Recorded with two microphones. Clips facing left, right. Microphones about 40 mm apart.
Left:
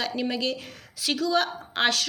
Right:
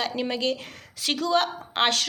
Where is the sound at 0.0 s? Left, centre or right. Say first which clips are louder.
Right 1 dB; right.